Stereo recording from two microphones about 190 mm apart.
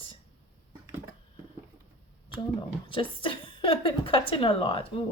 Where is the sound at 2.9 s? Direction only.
25° left (ahead or behind).